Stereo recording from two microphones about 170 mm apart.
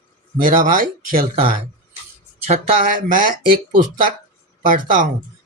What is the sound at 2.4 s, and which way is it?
Speech, 50° right (ahead or behind).